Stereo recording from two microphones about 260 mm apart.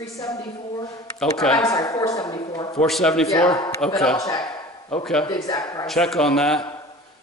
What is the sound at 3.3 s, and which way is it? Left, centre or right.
A man's voice, centre.